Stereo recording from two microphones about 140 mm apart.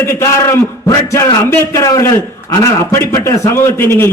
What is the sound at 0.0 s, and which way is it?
A man's voice, 20° left (ahead or behind).